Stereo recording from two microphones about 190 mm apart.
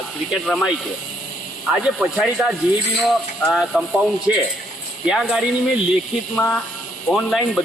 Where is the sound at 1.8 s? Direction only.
5° right (ahead or behind).